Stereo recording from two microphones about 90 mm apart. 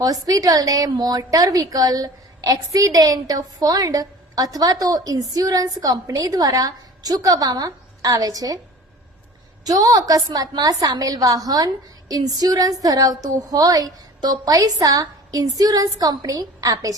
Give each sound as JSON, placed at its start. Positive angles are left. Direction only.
{"t": 0.0, "sound": "a woman's voice", "side_deg": -40}
{"t": 9.6, "sound": "a woman's voice", "side_deg": -40}